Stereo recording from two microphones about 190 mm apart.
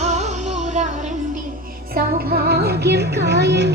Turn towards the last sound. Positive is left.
turn(degrees=-65)  # may be behind; listen again after turning